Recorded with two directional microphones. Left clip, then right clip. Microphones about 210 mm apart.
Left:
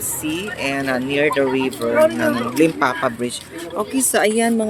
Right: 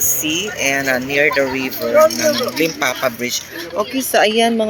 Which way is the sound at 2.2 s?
25° left (ahead or behind).